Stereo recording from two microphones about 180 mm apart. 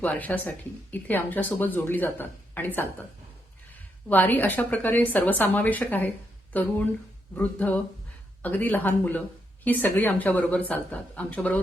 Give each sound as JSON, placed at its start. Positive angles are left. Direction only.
{"t": 0.0, "sound": "speech", "side_deg": 10}
{"t": 4.1, "sound": "speech", "side_deg": 10}